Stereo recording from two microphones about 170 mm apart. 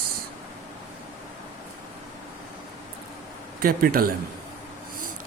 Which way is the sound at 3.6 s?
60° right (ahead or behind).